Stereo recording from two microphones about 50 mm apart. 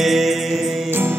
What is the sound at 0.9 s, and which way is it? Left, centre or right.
Music, right.